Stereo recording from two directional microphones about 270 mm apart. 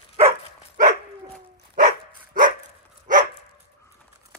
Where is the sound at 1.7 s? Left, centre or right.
Right.